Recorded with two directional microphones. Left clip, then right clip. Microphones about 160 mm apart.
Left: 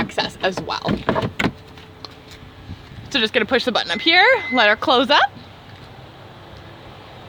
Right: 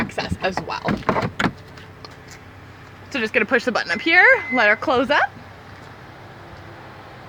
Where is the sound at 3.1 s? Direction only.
15° left (ahead or behind).